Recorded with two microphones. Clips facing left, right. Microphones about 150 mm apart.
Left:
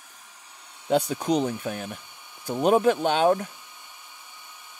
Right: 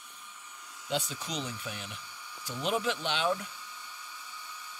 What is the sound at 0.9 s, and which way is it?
Speech, 55° left (ahead or behind).